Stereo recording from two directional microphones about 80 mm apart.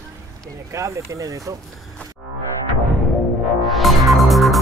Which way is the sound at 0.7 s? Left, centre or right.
Right.